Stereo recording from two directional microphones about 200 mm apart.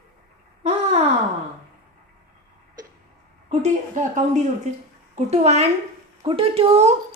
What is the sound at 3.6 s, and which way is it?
A woman's voice, 35° right (ahead or behind).